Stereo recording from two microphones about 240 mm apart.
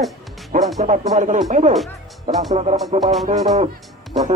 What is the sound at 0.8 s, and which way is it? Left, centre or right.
Speech, right.